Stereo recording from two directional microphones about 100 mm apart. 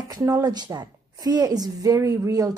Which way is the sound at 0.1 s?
40° right (ahead or behind).